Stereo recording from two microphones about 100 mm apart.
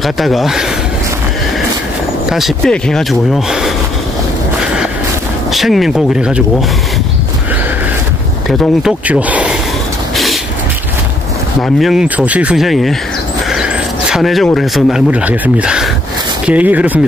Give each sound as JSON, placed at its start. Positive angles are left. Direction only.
{"t": 0.0, "sound": "speech", "side_deg": 0}
{"t": 2.2, "sound": "speech", "side_deg": 0}
{"t": 5.5, "sound": "speech", "side_deg": 0}
{"t": 8.5, "sound": "speech", "side_deg": 0}
{"t": 9.0, "sound": "speech", "side_deg": -15}
{"t": 10.1, "sound": "vehicle", "side_deg": 0}
{"t": 11.6, "sound": "speech", "side_deg": -5}
{"t": 12.5, "sound": "speech", "side_deg": 0}
{"t": 13.5, "sound": "a sound", "side_deg": -5}
{"t": 15.0, "sound": "speech", "side_deg": -15}